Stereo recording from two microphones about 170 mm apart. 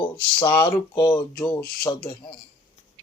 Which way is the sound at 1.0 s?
10° left (ahead or behind).